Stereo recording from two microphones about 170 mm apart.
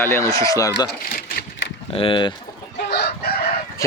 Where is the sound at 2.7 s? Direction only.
75° left (ahead or behind).